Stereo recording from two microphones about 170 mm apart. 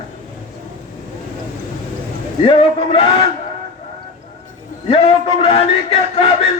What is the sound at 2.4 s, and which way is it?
Speech, 30° left (ahead or behind).